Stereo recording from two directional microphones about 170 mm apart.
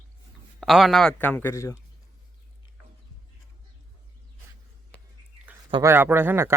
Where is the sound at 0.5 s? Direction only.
Centre (ahead or behind); by 1.7 s 15° left (ahead or behind).